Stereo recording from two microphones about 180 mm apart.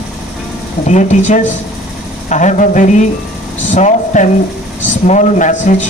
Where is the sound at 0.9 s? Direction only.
40° left (ahead or behind).